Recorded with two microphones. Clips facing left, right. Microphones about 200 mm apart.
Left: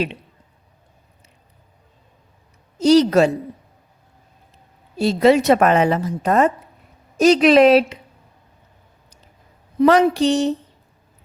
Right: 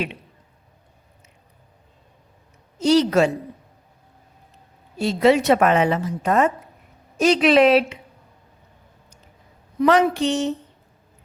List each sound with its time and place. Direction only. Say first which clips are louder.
2.7 s a woman's voice: left 4 dB; 40° left (ahead or behind)
4.9 s a woman's voice: left 3 dB; 40° left (ahead or behind)
9.8 s a woman's voice: left 3 dB; 35° left (ahead or behind)